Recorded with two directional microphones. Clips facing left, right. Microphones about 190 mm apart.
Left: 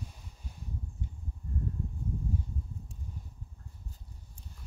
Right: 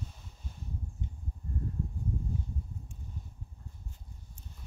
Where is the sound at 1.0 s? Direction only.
20° right (ahead or behind).